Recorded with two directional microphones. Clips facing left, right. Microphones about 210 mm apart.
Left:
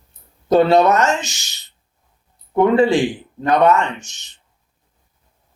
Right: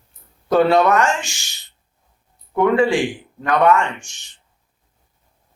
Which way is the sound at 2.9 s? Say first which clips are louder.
Left 3 dB; 35° left (ahead or behind).